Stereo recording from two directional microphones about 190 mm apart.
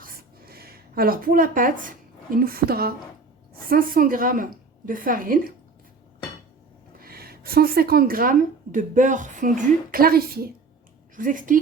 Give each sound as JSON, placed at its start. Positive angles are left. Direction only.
{"t": 0.0, "sound": "a sound", "side_deg": -50}
{"t": 2.3, "sound": "a woman's voice", "side_deg": -50}
{"t": 7.0, "sound": "a woman's voice", "side_deg": -55}